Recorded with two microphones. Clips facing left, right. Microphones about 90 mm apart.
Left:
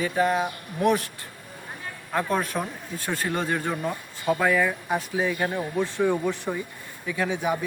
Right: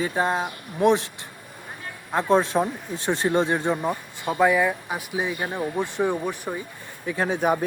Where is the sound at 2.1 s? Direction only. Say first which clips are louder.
Right 5 dB; 25° right (ahead or behind).